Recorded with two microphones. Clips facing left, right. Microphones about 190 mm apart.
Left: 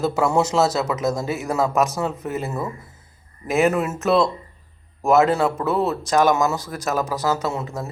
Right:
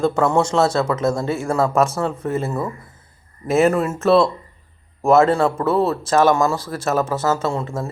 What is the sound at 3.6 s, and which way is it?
A man's voice, 5° left (ahead or behind).